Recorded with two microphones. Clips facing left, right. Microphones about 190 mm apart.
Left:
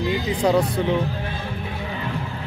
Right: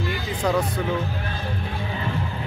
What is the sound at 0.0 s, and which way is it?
Speech, 20° left (ahead or behind).